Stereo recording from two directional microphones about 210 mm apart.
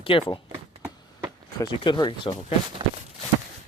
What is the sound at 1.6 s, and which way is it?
Speech, 20° left (ahead or behind).